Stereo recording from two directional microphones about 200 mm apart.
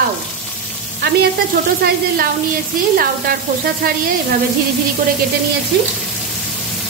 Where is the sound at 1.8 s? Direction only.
50° right (ahead or behind).